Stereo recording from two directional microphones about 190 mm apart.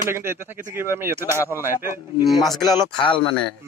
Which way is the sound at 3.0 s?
25° left (ahead or behind).